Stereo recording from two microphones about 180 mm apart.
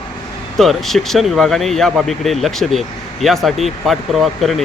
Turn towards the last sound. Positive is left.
turn(degrees=0)  # may be behind; listen again after turning